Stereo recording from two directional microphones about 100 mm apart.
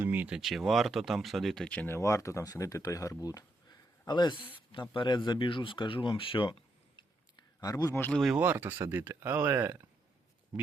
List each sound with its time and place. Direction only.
0.0 s a sound: 20° right (ahead or behind)
0.3 s speech: 5° right (ahead or behind)
1.9 s speech: 30° left (ahead or behind); by 7.0 s 55° left (ahead or behind)
7.6 s speech: 40° left (ahead or behind)
8.1 s speech: centre (ahead or behind)
8.4 s speech: 20° right (ahead or behind)